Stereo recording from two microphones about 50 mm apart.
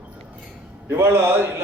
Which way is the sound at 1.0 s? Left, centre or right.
Right.